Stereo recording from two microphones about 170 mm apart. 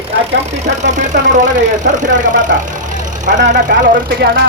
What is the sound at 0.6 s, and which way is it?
Speech, 45° right (ahead or behind).